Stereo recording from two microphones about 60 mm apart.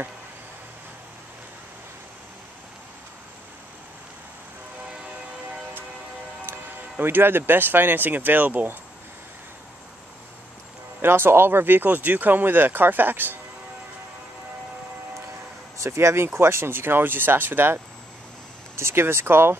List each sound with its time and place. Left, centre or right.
7.0 s speech: right
11.0 s speech: right
15.8 s speech: right
18.8 s speech: right